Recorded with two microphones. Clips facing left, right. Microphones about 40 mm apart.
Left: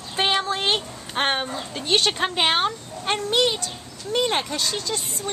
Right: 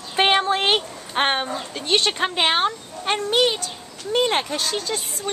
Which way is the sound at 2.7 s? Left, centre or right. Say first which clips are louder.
Right 1 dB; centre.